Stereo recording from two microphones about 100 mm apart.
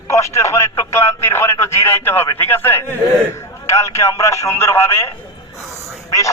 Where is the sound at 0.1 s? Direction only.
30° left (ahead or behind).